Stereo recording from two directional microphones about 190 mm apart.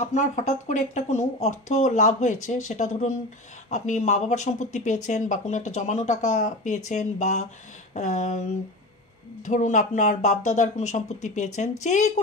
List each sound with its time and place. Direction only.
0.0 s speech: 40° left (ahead or behind)